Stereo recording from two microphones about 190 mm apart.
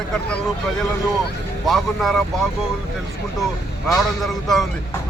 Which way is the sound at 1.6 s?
Centre (ahead or behind).